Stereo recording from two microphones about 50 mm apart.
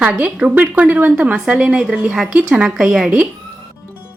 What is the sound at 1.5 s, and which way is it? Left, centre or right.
A woman's voice, centre.